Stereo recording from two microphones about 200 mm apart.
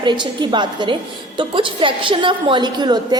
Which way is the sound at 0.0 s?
25° right (ahead or behind).